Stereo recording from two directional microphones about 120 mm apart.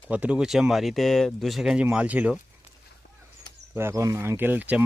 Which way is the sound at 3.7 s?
20° right (ahead or behind).